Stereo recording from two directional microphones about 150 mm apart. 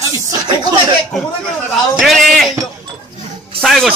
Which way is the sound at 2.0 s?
Centre (ahead or behind).